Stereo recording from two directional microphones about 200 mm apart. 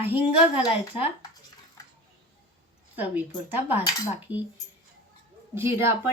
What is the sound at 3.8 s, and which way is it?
Cutlery, 20° left (ahead or behind).